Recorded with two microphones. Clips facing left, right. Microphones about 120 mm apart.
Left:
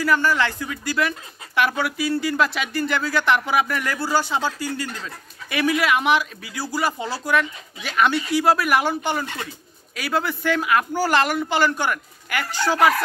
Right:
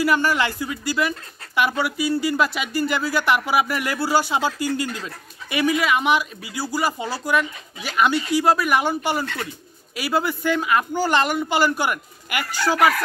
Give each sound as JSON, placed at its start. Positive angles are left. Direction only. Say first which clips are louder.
{"t": 0.0, "sound": "speech", "louder": "even", "side_deg": -15}
{"t": 9.2, "sound": "speech", "louder": "right 2 dB", "side_deg": 20}
{"t": 9.9, "sound": "speech", "louder": "right 1 dB", "side_deg": -5}